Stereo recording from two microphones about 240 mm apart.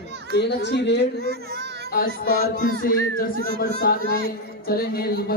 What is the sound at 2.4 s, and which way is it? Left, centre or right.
Speech, left.